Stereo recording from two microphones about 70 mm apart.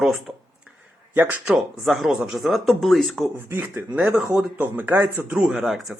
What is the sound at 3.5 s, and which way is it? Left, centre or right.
Speech, right.